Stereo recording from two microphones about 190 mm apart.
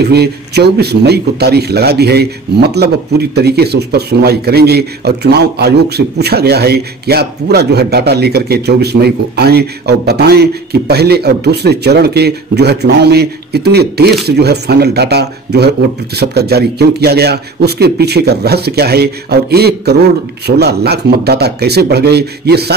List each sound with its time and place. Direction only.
0.0 s speech: 60° right (ahead or behind)